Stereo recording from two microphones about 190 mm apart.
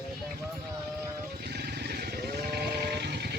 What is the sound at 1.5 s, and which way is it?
Vehicle, 60° right (ahead or behind).